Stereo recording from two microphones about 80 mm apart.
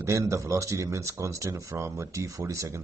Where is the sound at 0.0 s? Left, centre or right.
Right.